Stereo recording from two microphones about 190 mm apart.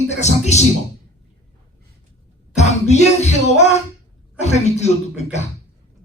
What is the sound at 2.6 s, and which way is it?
Music, 35° left (ahead or behind).